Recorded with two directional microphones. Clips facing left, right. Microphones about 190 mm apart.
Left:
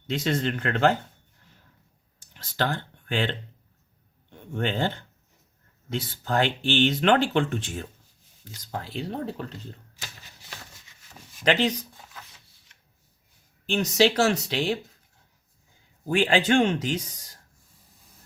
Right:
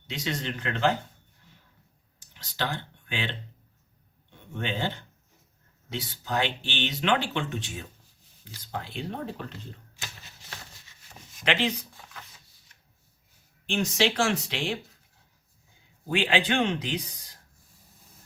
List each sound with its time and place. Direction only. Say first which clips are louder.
0.1 s speech: left 6 dB; 50° left (ahead or behind)
2.1 s clicking: left 5 dB; 50° left (ahead or behind)
4.5 s speech: left 5 dB; 50° left (ahead or behind)
5.9 s speech: left 4 dB; 50° left (ahead or behind)
8.7 s speech: left 3 dB; 40° left (ahead or behind)
11.4 s speech: left 4 dB; 40° left (ahead or behind)
13.7 s speech: left 4 dB; 40° left (ahead or behind)
16.0 s speech: left 4 dB; 45° left (ahead or behind)